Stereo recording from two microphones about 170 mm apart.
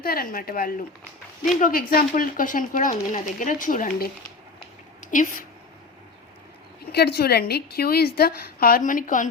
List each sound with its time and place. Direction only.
0.0 s a woman's voice: 60° left (ahead or behind)
6.9 s a woman's voice: 70° left (ahead or behind); by 9.3 s 50° left (ahead or behind)